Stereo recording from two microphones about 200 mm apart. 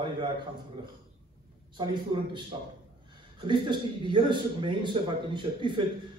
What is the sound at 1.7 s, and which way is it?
A man's voice, 20° right (ahead or behind).